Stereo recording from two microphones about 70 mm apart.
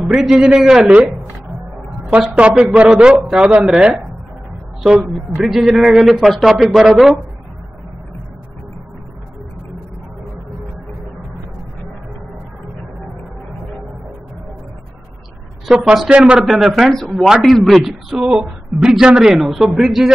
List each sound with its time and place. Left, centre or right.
0.0 s a man's voice: centre
2.3 s a man's voice: centre
5.4 s a man's voice: centre
15.6 s speech: centre